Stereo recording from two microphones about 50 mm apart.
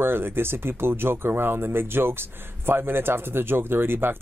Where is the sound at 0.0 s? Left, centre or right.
Right.